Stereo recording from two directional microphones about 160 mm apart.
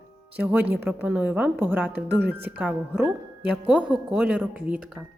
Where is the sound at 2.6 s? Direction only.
5° right (ahead or behind).